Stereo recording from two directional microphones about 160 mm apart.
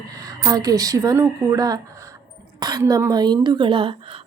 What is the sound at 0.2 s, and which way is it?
A woman's voice, 20° right (ahead or behind).